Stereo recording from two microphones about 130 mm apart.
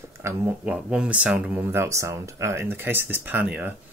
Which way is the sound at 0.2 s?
20° right (ahead or behind).